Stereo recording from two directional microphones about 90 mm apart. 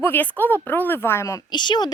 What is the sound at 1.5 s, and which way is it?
Speech, 55° left (ahead or behind).